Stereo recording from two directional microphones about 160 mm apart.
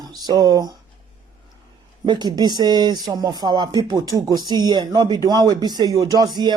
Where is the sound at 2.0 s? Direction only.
25° right (ahead or behind).